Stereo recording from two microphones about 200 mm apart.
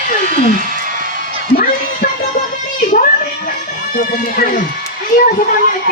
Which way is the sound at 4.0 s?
45° left (ahead or behind).